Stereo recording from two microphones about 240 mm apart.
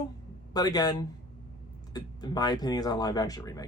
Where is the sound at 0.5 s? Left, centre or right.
Centre.